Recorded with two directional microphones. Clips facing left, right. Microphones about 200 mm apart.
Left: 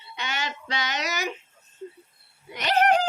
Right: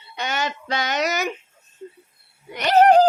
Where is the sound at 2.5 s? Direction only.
45° right (ahead or behind).